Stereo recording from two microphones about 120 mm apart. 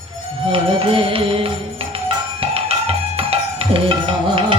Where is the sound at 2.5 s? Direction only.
55° right (ahead or behind).